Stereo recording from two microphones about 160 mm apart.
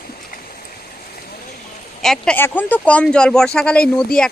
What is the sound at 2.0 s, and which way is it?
Speech, 5° left (ahead or behind).